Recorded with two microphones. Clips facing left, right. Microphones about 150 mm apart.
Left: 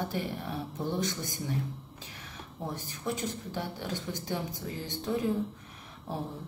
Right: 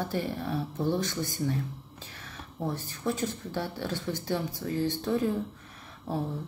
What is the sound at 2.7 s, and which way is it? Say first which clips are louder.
Speech: right 3 dB; 15° left (ahead or behind).